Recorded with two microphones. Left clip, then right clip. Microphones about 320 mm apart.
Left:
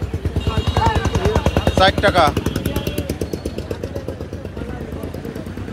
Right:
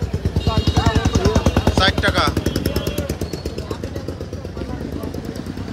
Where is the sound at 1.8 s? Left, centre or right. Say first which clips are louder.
Left 5 dB; centre.